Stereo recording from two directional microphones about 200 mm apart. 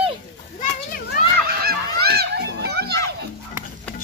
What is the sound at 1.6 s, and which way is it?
Honk, 50° right (ahead or behind).